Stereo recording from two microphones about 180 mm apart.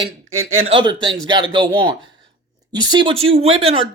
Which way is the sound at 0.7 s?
25° right (ahead or behind).